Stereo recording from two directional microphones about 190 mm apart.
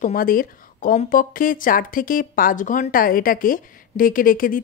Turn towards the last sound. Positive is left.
turn(degrees=45)  # may be behind; listen again after turning